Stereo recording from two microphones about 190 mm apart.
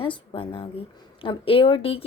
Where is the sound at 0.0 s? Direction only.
25° left (ahead or behind).